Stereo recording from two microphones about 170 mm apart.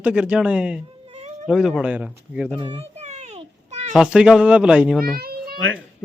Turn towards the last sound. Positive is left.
turn(degrees=-65)  # may be behind; listen again after turning